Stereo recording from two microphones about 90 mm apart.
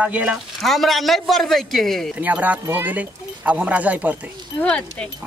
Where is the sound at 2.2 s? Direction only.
15° right (ahead or behind).